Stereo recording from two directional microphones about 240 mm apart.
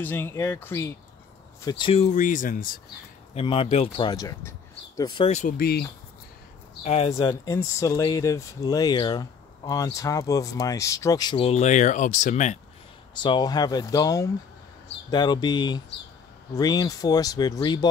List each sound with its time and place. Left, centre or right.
0.0 s speech: centre; by 2.8 s left
3.3 s speech: left
6.8 s speech: left
13.1 s speech: centre